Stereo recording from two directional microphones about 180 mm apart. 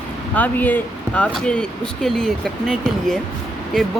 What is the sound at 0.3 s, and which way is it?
Speech, 10° left (ahead or behind).